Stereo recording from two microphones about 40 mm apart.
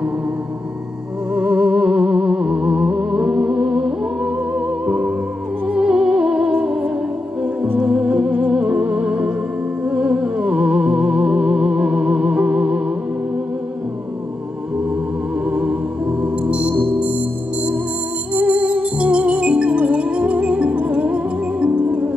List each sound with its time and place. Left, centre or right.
1.3 s music: right
8.7 s music: right
9.0 s music: right
15.4 s music: right